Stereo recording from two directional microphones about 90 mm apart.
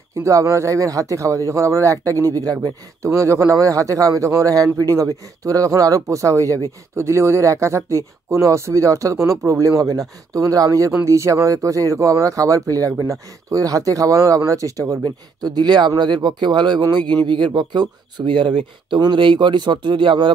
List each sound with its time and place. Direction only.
0.2 s speech: 35° right (ahead or behind)
15.0 s speech: 50° right (ahead or behind)